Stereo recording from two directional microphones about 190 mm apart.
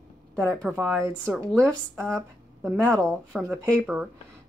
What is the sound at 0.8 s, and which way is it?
Speech, 10° right (ahead or behind).